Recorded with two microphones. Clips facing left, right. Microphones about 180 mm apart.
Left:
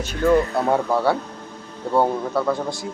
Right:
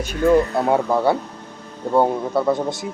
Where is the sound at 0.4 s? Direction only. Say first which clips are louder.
Right 1 dB; centre (ahead or behind).